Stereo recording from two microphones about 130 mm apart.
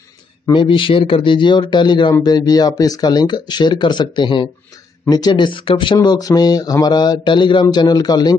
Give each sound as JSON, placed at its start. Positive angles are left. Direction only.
{"t": 0.5, "sound": "speech", "side_deg": 40}
{"t": 5.9, "sound": "speech", "side_deg": 30}